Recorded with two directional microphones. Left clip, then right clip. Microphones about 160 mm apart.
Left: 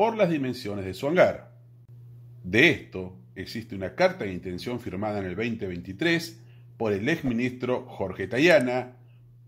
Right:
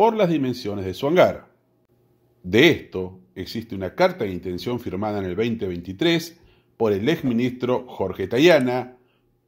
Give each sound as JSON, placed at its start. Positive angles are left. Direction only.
{"t": 0.0, "sound": "speech", "side_deg": -35}
{"t": 2.5, "sound": "speech", "side_deg": -40}